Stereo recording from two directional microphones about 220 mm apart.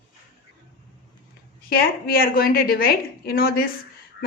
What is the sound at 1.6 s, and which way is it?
Speech, 40° left (ahead or behind).